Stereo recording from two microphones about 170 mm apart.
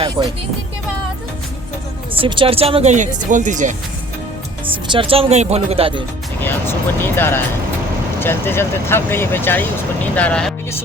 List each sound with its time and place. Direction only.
0.2 s speech: 25° right (ahead or behind)
2.1 s speech: 30° right (ahead or behind); by 3.8 s 45° right (ahead or behind)
4.9 s speech: 30° right (ahead or behind)
6.4 s speech: 10° left (ahead or behind)